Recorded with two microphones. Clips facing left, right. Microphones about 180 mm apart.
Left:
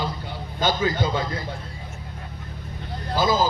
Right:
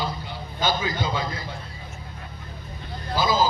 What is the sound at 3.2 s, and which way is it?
Speech, 50° left (ahead or behind).